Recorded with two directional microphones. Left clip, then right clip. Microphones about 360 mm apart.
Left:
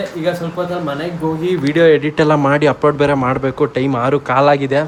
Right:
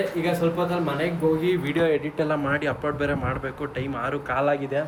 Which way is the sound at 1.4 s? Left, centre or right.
Left.